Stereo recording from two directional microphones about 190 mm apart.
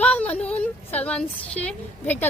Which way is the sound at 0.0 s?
5° left (ahead or behind).